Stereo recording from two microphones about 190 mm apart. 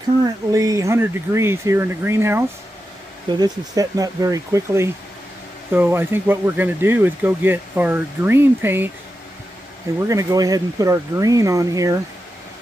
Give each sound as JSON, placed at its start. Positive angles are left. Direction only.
{"t": 0.2, "sound": "speech", "side_deg": -20}
{"t": 10.0, "sound": "speech", "side_deg": -20}